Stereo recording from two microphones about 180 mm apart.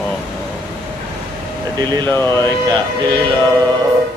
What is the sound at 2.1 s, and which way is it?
Speech, 15° left (ahead or behind).